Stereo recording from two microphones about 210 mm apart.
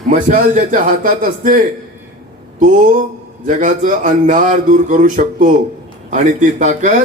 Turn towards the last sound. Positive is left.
turn(degrees=-35)  # may be behind; listen again after turning